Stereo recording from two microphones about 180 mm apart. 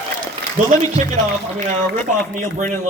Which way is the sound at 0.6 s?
35° right (ahead or behind).